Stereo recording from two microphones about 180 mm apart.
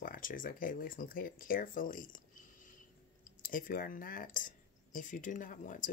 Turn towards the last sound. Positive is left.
turn(degrees=45)  # may be behind; listen again after turning